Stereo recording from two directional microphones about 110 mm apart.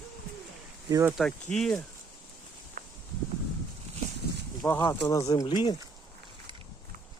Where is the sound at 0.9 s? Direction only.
20° right (ahead or behind).